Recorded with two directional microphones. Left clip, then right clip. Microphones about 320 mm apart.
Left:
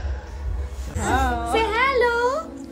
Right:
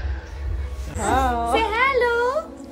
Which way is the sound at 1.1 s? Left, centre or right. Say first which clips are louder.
Right 2 dB; right.